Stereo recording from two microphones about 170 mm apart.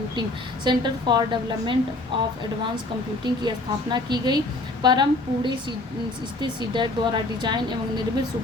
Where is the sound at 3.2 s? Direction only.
25° right (ahead or behind).